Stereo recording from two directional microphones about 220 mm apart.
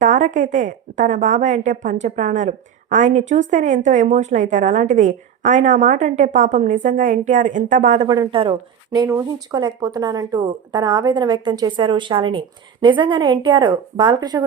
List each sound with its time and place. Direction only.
0.0 s a woman's voice: 35° right (ahead or behind); by 14.4 s 20° right (ahead or behind)